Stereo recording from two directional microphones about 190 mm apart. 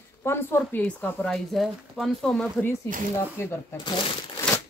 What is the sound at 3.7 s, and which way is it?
Speech, 25° left (ahead or behind).